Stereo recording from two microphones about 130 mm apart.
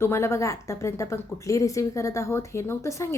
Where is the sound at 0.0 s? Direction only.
20° left (ahead or behind).